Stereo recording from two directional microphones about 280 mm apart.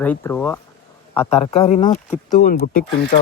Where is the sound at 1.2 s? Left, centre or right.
Left.